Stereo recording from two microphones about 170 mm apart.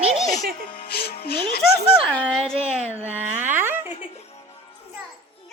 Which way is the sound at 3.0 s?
10° right (ahead or behind).